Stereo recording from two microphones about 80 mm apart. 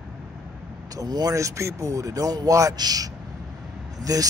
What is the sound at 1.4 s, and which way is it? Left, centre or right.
Speech, right.